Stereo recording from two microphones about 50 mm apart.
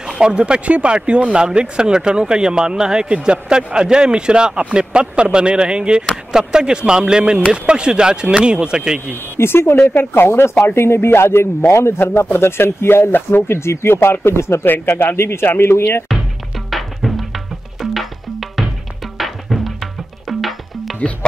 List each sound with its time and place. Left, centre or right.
0.2 s speech: centre
9.4 s speech: left
13.6 s speech: left
14.9 s speech: left
16.7 s music: centre